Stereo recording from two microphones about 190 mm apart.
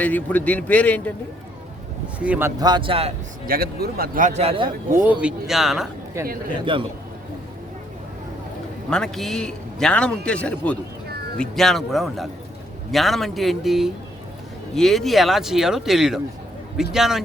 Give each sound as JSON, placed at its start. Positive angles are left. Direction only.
{"t": 0.0, "sound": "a man's voice", "side_deg": 10}
{"t": 2.1, "sound": "speech", "side_deg": -5}
{"t": 2.6, "sound": "speech", "side_deg": -20}
{"t": 3.4, "sound": "speech", "side_deg": -50}
{"t": 5.2, "sound": "a man's voice", "side_deg": 0}
{"t": 6.2, "sound": "speech", "side_deg": -15}
{"t": 6.7, "sound": "speech", "side_deg": -25}
{"t": 8.9, "sound": "a man's voice", "side_deg": 0}